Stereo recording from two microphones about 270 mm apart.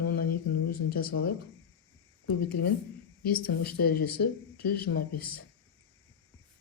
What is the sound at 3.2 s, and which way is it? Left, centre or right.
Speech, left.